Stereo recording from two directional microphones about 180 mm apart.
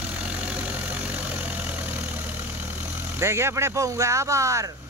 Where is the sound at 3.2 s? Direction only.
15° right (ahead or behind).